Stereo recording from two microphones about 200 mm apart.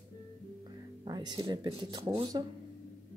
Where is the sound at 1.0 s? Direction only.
20° right (ahead or behind).